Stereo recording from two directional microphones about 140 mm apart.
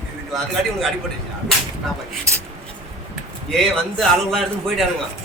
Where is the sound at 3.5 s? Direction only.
5° left (ahead or behind).